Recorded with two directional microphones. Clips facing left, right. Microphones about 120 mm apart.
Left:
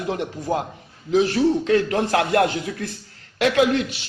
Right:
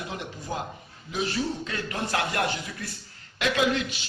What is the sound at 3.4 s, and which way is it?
Speech, 65° left (ahead or behind).